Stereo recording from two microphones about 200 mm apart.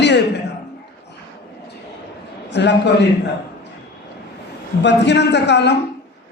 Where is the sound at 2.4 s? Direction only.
60° left (ahead or behind).